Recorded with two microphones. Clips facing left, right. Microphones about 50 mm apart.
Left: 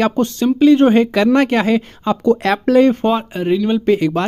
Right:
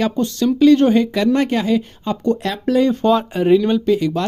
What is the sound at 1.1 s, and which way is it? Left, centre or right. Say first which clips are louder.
Speech: left 3 dB; left.